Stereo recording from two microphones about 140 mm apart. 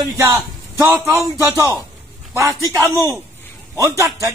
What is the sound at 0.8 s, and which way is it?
A man's voice, 20° right (ahead or behind).